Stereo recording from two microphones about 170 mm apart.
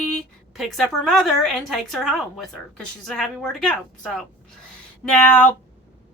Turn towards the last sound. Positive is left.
turn(degrees=10)  # may be behind; listen again after turning